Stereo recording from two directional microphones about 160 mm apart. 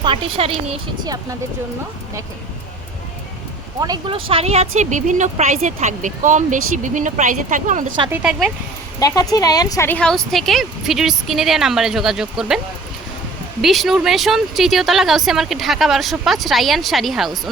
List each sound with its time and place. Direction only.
0.0 s a woman's voice: 35° right (ahead or behind)
1.0 s speech: 25° right (ahead or behind)
3.8 s speech: 25° right (ahead or behind); by 7.9 s 55° right (ahead or behind)
8.1 s a woman's voice: 5° right (ahead or behind)
9.0 s a woman's voice: 25° left (ahead or behind); by 12.5 s 5° right (ahead or behind)
13.6 s a woman's voice: centre (ahead or behind)